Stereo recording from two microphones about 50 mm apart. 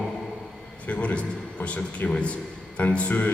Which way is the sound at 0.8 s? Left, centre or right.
Left.